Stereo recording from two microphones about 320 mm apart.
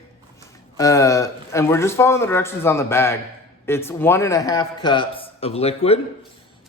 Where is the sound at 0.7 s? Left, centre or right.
Centre.